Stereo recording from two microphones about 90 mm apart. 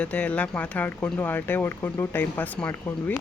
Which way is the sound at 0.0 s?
15° left (ahead or behind).